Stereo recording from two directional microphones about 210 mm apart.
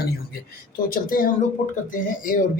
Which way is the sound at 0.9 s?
40° left (ahead or behind).